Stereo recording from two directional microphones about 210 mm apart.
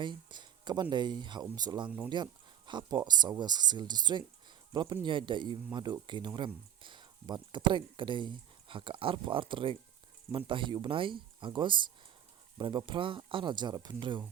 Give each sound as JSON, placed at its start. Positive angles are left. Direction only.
{"t": 0.0, "sound": "speech", "side_deg": -20}